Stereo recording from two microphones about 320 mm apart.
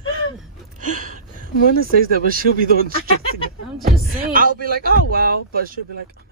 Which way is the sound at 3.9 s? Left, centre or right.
Right.